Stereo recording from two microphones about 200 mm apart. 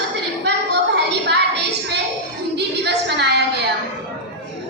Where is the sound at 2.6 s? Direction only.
55° right (ahead or behind).